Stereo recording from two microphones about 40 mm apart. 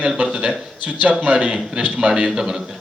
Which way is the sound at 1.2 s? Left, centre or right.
Right.